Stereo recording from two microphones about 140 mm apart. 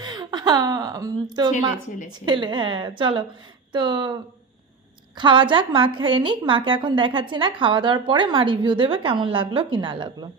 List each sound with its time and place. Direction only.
0.0 s a woman's voice: 30° right (ahead or behind)